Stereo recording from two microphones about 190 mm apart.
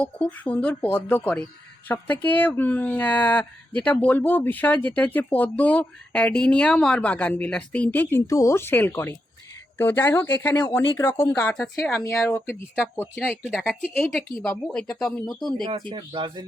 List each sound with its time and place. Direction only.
0.0 s speech: 5° left (ahead or behind)
15.9 s speech: 25° right (ahead or behind)